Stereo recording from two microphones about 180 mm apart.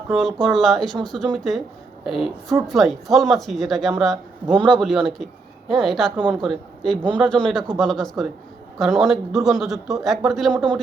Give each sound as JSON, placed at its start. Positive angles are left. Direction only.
{"t": 0.1, "sound": "speech", "side_deg": 0}
{"t": 4.4, "sound": "a man's voice", "side_deg": -25}
{"t": 4.7, "sound": "speech", "side_deg": 0}
{"t": 10.5, "sound": "a man's voice", "side_deg": -25}